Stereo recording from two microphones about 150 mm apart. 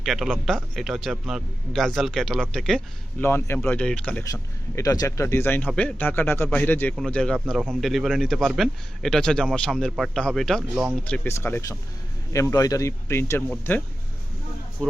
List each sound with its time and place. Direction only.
0.0 s a man's voice: centre (ahead or behind)
3.2 s speech: 15° left (ahead or behind)
4.3 s a man's voice: 20° left (ahead or behind); by 11.0 s centre (ahead or behind)
11.0 s a man's voice: 10° left (ahead or behind)